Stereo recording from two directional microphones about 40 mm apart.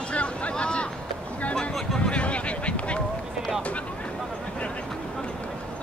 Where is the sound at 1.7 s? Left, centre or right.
Centre.